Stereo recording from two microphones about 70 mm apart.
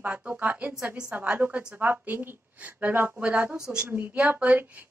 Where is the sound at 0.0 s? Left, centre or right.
Centre.